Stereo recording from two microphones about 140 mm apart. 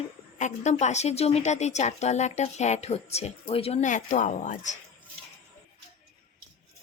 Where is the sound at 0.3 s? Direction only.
60° left (ahead or behind).